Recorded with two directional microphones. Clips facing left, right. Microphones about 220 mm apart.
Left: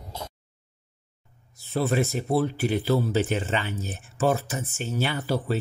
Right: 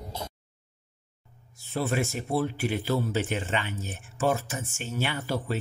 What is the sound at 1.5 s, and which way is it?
Speech, 40° left (ahead or behind).